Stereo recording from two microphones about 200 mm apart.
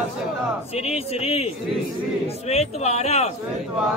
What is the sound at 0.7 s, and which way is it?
A man's voice, 30° left (ahead or behind).